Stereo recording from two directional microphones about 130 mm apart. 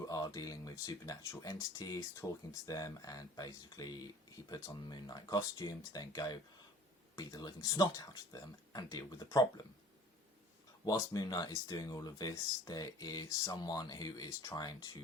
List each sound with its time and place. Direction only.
0.0 s speech: 30° left (ahead or behind)
10.8 s speech: 30° left (ahead or behind)